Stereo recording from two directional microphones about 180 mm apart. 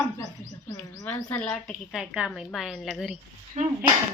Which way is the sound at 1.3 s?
5° left (ahead or behind).